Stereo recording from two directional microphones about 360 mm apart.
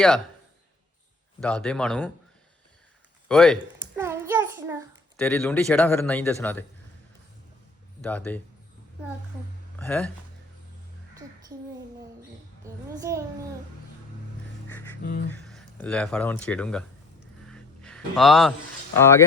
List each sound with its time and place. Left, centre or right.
1.4 s a man's voice: centre
3.2 s a sound: centre
5.1 s a man's voice: centre
8.0 s a man's voice: centre
9.7 s speech: centre
13.0 s a child's voice: centre
14.7 s music: centre
15.0 s speech: left
15.3 s speech: centre
17.5 s a sound: centre